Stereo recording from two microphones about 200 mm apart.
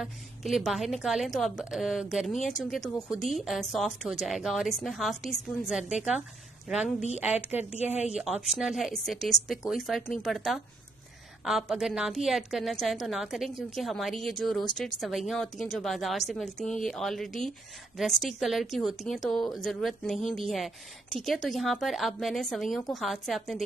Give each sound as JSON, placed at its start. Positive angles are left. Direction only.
{"t": 0.0, "sound": "a woman's voice", "side_deg": 0}
{"t": 7.8, "sound": "speech", "side_deg": 35}
{"t": 8.1, "sound": "a woman's voice", "side_deg": -5}